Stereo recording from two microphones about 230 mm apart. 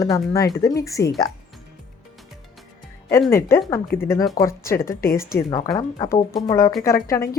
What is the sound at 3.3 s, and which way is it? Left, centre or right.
Speech, centre.